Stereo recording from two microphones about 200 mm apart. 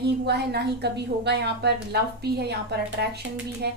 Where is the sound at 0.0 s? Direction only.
55° right (ahead or behind).